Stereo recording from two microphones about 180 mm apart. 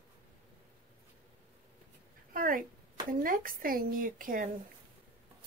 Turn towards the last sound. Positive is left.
turn(degrees=-50)  # may be behind; listen again after turning